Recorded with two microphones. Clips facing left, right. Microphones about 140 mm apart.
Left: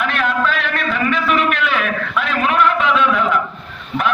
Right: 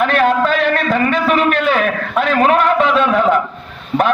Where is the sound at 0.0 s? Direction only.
40° right (ahead or behind).